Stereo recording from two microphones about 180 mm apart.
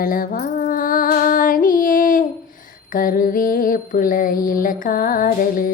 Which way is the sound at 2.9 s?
50° left (ahead or behind).